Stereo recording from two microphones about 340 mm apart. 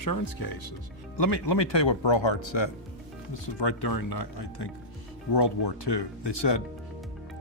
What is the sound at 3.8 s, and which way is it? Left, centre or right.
Speech, left.